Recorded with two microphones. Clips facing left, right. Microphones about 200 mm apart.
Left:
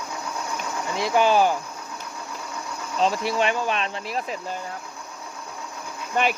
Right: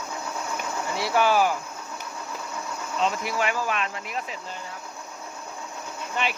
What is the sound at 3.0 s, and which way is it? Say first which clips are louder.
Speech: left 4 dB; 30° left (ahead or behind).